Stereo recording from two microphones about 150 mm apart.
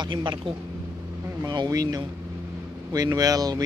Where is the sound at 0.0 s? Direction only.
30° right (ahead or behind).